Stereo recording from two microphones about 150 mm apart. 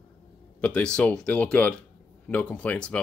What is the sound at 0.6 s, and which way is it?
Speech, 10° left (ahead or behind).